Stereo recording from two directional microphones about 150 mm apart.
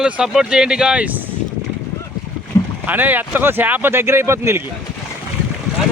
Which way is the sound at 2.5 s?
20° left (ahead or behind).